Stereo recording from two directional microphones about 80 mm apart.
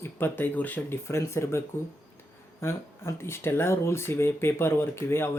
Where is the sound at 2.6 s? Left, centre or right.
Left.